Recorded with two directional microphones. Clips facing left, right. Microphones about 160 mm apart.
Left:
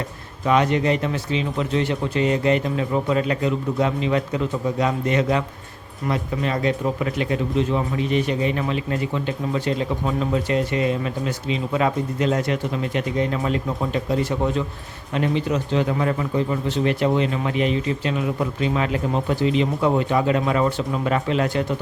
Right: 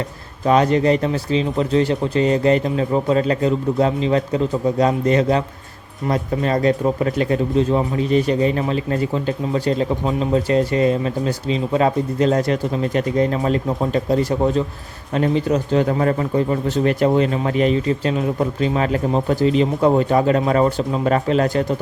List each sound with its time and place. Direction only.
0.4 s speech: 35° right (ahead or behind)